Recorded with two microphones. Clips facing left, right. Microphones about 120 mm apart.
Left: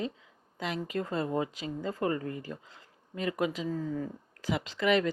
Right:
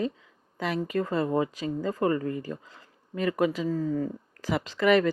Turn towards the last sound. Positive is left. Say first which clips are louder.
# right 5 dB
turn(degrees=-50)  # may be behind; listen again after turning